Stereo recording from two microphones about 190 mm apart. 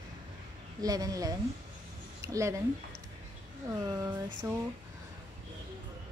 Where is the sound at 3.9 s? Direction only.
20° right (ahead or behind).